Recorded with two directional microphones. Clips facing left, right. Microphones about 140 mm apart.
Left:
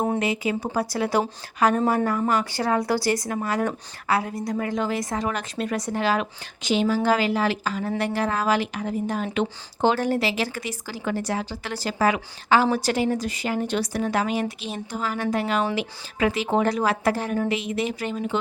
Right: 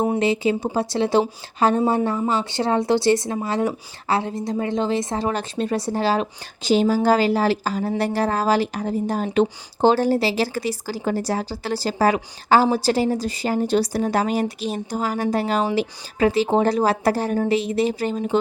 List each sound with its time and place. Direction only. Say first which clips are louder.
0.2 s a woman's voice: right 5 dB; 30° right (ahead or behind)